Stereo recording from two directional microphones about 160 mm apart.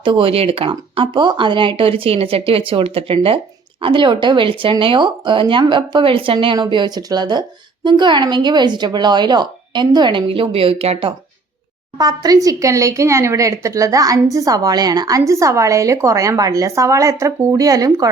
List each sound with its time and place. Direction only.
0.0 s speech: 35° right (ahead or behind)
11.9 s speech: 25° right (ahead or behind)